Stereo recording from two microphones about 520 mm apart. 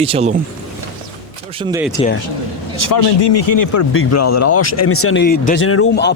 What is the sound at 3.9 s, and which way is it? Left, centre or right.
Speech, left.